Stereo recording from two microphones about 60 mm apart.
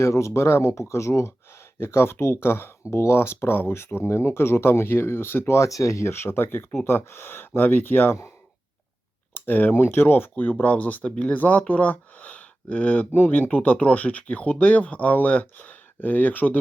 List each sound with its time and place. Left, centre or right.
0.0 s speech: left
5.6 s speech: left
9.3 s speech: left